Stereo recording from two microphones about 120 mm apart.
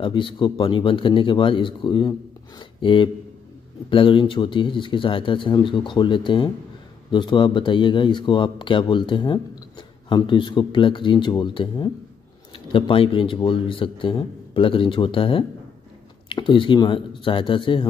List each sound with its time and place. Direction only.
0.0 s speech: 45° left (ahead or behind)